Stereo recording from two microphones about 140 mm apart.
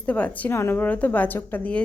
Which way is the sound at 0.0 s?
10° left (ahead or behind).